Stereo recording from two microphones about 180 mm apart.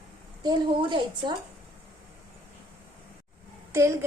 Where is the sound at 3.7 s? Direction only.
15° right (ahead or behind).